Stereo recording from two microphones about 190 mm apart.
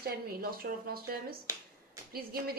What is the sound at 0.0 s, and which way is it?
Speech, 55° right (ahead or behind).